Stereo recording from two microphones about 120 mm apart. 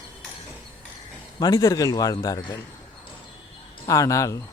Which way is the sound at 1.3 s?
30° left (ahead or behind).